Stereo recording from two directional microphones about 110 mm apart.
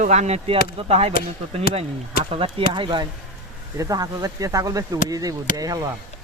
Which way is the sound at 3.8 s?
35° right (ahead or behind).